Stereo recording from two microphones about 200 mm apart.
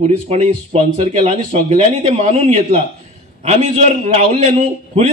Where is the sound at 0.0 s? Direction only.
30° right (ahead or behind).